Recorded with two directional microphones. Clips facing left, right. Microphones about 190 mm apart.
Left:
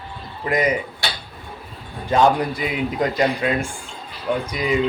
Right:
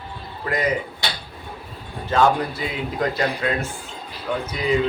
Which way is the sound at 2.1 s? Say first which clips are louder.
Left 2 dB; 15° left (ahead or behind).